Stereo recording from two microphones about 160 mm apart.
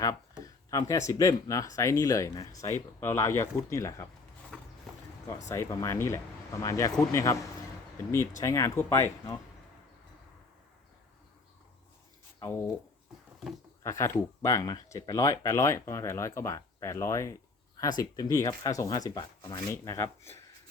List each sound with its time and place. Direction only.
0.0 s speech: 20° left (ahead or behind)
5.5 s speech: 20° left (ahead or behind)
8.4 s speech: 20° left (ahead or behind)
13.8 s speech: 20° left (ahead or behind)
19.7 s speech: 15° left (ahead or behind)